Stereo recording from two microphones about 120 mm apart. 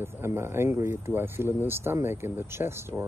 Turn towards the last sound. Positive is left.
turn(degrees=-20)  # may be behind; listen again after turning